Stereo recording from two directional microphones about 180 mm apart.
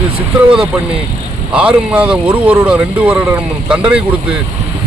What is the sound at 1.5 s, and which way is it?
Speech, 5° right (ahead or behind).